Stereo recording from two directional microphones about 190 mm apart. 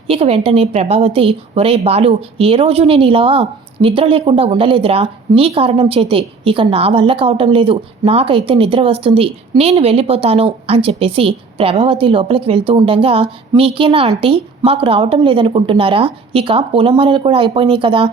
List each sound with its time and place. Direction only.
0.1 s a woman's voice: 30° right (ahead or behind)